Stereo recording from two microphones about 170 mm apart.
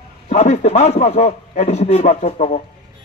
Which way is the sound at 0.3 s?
40° left (ahead or behind).